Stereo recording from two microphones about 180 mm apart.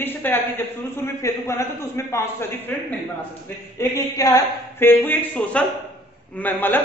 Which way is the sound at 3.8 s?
20° left (ahead or behind).